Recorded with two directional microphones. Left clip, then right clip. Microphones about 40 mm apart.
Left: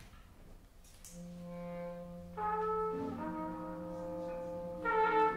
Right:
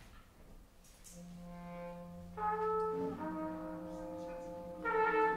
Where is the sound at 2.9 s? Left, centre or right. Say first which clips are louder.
Even; centre.